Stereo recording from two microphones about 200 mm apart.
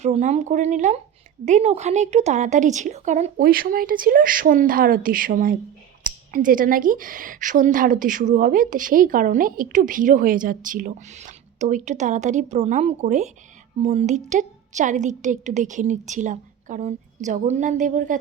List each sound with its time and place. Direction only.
0.0 s a woman's voice: 35° right (ahead or behind)
3.3 s a woman's voice: 45° right (ahead or behind)